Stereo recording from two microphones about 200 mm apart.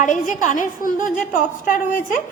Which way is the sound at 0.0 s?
40° left (ahead or behind).